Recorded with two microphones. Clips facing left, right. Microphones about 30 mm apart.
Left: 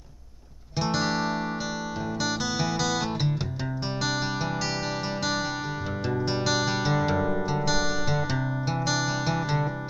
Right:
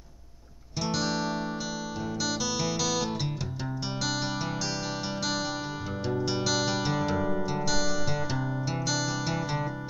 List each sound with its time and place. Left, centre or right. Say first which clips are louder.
0.7 s music: left 3 dB; left
6.2 s music: left 2 dB; left